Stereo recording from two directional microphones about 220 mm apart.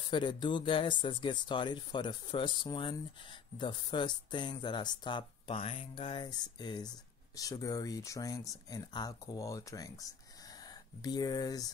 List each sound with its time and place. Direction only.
0.1 s speech: 20° left (ahead or behind)